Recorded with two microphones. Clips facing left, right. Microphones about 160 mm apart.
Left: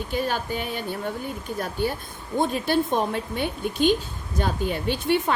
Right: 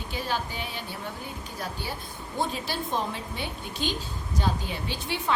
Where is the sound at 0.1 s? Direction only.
50° left (ahead or behind).